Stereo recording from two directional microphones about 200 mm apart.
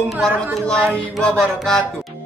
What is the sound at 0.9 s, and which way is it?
Speech, 5° left (ahead or behind).